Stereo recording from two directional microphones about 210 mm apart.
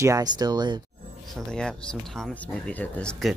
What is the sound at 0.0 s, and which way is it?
Speech, 15° right (ahead or behind).